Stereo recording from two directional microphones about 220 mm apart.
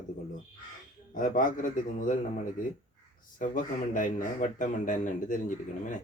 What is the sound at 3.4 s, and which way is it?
Speech, 35° left (ahead or behind).